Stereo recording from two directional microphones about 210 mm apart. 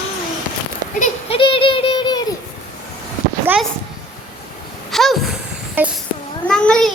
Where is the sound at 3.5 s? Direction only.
10° right (ahead or behind).